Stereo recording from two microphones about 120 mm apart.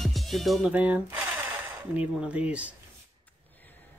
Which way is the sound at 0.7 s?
10° right (ahead or behind).